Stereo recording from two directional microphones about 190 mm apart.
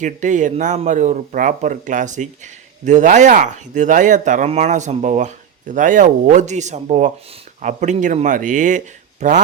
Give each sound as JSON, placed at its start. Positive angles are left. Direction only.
{"t": 0.0, "sound": "speech", "side_deg": -40}